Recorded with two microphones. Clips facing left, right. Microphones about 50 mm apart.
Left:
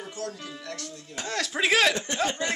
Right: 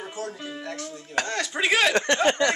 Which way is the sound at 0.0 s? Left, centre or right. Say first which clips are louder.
Right 2 dB; right.